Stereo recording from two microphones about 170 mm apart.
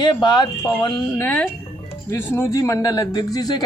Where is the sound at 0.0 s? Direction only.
25° left (ahead or behind).